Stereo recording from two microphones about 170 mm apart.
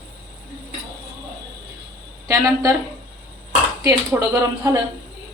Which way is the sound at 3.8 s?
20° right (ahead or behind).